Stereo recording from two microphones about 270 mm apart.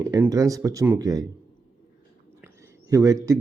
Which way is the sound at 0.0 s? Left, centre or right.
Centre.